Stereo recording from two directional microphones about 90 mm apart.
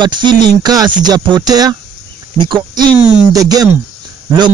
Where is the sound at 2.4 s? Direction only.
60° right (ahead or behind).